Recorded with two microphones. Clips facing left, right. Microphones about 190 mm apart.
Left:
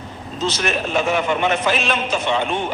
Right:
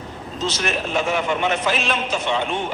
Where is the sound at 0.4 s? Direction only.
60° left (ahead or behind).